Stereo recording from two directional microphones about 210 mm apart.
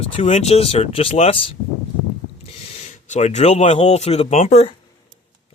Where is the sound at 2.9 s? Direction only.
35° left (ahead or behind).